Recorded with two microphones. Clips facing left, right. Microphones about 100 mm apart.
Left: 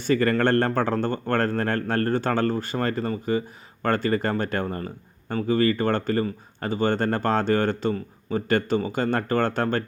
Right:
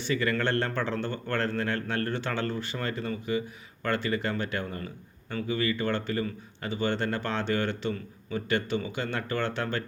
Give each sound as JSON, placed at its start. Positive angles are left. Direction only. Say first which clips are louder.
{"t": 0.0, "sound": "speech", "louder": "left 7 dB", "side_deg": 45}